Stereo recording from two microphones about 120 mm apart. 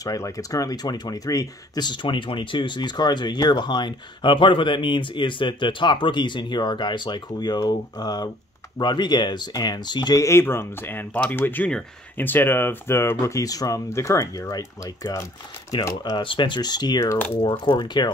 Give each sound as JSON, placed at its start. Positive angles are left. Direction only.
{"t": 0.0, "sound": "speech", "side_deg": 30}